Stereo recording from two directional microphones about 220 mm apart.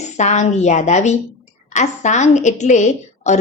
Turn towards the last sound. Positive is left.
turn(degrees=30)  # may be behind; listen again after turning